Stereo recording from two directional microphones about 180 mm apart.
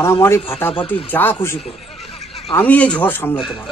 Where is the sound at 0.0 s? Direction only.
15° left (ahead or behind).